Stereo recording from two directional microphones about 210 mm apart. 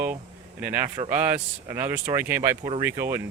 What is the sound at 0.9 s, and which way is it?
Speech, 30° right (ahead or behind).